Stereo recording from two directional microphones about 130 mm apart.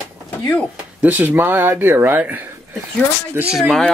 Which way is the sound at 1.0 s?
15° right (ahead or behind).